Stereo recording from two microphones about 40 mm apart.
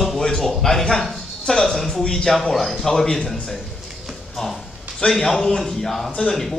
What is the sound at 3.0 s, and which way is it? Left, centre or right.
Speech, centre.